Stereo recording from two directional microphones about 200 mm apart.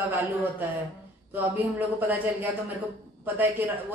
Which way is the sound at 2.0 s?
10° right (ahead or behind).